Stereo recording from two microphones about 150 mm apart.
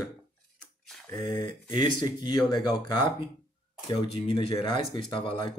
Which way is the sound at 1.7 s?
25° left (ahead or behind).